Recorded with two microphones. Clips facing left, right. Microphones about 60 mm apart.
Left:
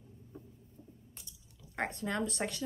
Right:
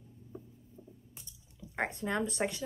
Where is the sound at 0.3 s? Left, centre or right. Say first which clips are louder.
Right 3 dB; centre.